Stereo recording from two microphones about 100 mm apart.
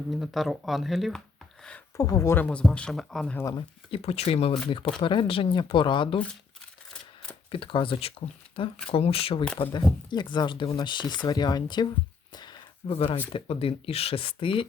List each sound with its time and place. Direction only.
0.1 s speech: centre (ahead or behind)
2.0 s speech: 30° left (ahead or behind)
2.4 s speech: 10° left (ahead or behind)
3.9 s speech: 90° left
4.9 s speech: 55° left (ahead or behind)
7.5 s speech: 60° left (ahead or behind)
8.9 s speech: 75° left (ahead or behind)
10.1 s speech: 50° left (ahead or behind)
12.3 s a sound: 45° left (ahead or behind)
12.9 s speech: 70° left (ahead or behind)